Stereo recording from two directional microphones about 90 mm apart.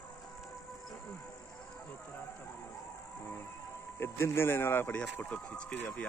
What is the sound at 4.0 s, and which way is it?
Speech, 30° left (ahead or behind).